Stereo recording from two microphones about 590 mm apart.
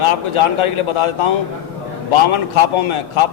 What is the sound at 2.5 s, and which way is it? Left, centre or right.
Speech, left.